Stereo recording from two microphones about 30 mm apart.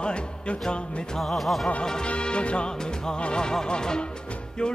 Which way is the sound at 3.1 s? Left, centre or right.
Left.